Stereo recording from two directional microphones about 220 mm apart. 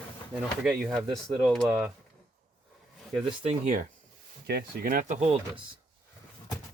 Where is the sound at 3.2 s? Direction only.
30° right (ahead or behind).